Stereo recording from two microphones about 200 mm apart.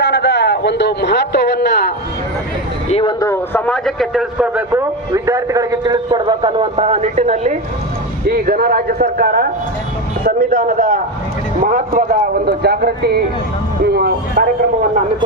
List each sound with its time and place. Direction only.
0.0 s a sound: 60° left (ahead or behind)
2.9 s a man's voice: 25° left (ahead or behind); by 7.6 s 35° right (ahead or behind)
8.3 s a man's voice: 50° right (ahead or behind)
12.5 s speech: 55° right (ahead or behind)